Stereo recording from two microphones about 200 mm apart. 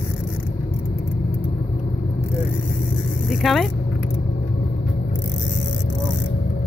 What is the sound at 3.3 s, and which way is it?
Vehicle, centre (ahead or behind).